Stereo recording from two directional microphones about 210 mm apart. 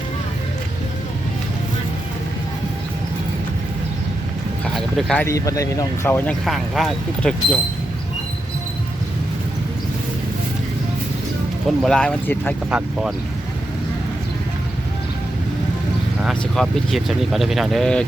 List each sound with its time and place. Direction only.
4.6 s speech: centre (ahead or behind)
11.8 s speech: 5° left (ahead or behind)
12.7 s speech: 5° right (ahead or behind)
16.2 s speech: centre (ahead or behind)